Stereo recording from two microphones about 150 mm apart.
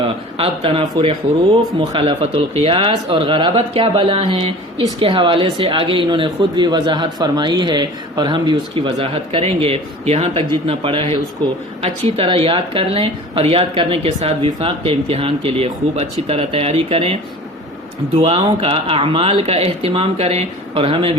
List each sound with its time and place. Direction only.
0.0 s speech: 40° right (ahead or behind)